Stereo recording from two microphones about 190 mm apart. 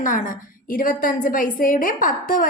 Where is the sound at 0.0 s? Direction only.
45° left (ahead or behind).